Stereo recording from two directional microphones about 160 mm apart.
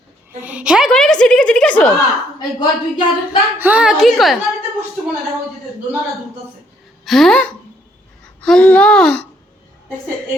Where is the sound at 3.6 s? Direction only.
10° right (ahead or behind).